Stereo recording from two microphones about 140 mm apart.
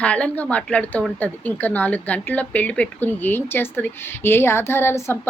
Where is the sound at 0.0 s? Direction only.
10° left (ahead or behind).